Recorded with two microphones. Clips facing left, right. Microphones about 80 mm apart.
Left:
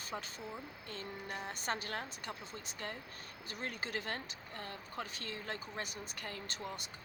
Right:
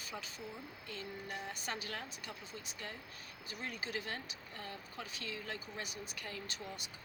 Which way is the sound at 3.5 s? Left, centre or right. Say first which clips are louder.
Left 2 dB; left.